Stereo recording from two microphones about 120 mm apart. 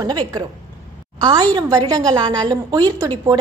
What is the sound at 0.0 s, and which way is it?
A woman's voice, 35° right (ahead or behind).